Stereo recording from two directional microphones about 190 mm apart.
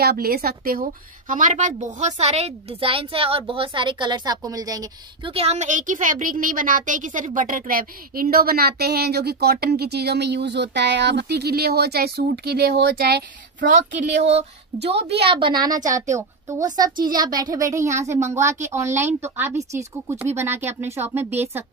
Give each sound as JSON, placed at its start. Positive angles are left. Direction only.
{"t": 0.0, "sound": "a woman's voice", "side_deg": -55}
{"t": 5.3, "sound": "a woman's voice", "side_deg": -35}
{"t": 15.0, "sound": "a woman's voice", "side_deg": -60}
{"t": 15.3, "sound": "a woman's voice", "side_deg": -25}